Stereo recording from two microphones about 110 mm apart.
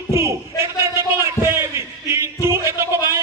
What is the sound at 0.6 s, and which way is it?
Music, 25° right (ahead or behind).